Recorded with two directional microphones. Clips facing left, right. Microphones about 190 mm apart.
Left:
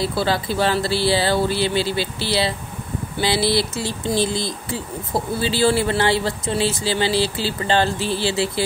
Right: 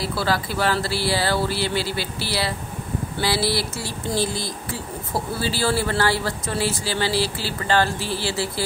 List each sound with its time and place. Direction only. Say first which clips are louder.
0.0 s speech: left 3 dB; 20° left (ahead or behind)